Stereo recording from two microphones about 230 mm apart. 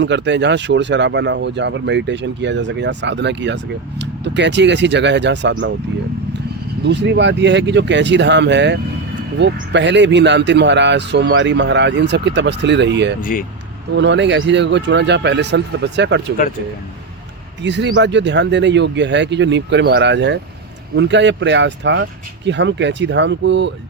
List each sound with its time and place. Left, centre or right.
0.0 s speech: right
6.8 s speech: right
17.6 s speech: right